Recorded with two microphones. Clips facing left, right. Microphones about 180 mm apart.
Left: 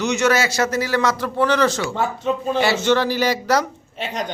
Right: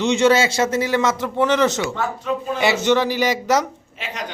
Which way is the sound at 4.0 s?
35° left (ahead or behind).